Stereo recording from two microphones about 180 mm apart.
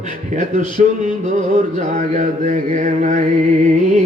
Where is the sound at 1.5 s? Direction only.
40° right (ahead or behind).